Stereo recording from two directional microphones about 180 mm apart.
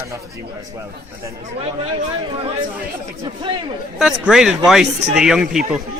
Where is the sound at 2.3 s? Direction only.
30° right (ahead or behind).